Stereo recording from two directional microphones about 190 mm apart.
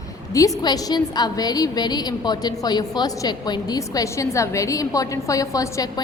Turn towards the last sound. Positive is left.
turn(degrees=20)  # may be behind; listen again after turning